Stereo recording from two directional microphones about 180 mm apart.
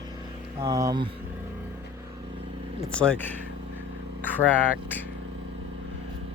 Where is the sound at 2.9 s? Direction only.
5° left (ahead or behind).